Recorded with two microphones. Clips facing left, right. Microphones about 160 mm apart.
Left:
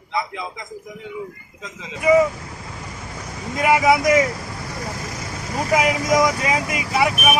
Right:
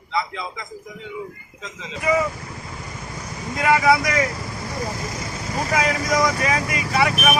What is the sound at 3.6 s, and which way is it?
Speech, 20° left (ahead or behind).